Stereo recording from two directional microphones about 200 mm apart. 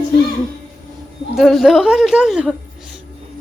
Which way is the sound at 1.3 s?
Centre (ahead or behind).